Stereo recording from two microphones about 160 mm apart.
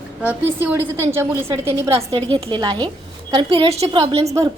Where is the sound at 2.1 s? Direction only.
35° right (ahead or behind).